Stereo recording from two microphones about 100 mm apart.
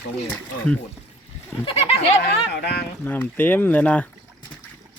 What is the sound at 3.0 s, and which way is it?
Speech, 20° left (ahead or behind).